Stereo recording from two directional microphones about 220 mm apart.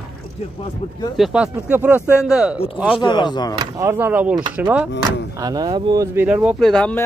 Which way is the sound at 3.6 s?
15° right (ahead or behind).